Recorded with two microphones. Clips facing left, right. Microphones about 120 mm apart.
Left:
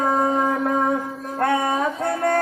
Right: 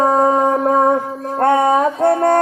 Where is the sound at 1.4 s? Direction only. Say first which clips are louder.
Right 7 dB; 30° right (ahead or behind).